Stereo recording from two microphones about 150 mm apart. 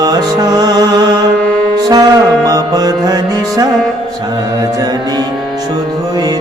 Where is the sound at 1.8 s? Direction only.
25° right (ahead or behind).